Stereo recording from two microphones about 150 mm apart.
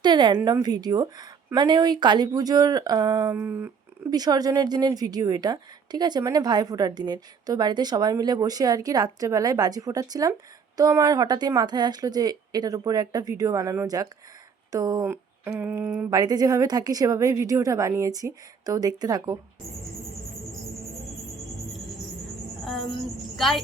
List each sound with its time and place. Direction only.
0.0 s a woman's voice: 30° right (ahead or behind)
3.3 s speech: 15° right (ahead or behind)
4.1 s a woman's voice: 25° right (ahead or behind)
15.0 s a sound: 15° right (ahead or behind)
16.0 s a woman's voice: 25° right (ahead or behind)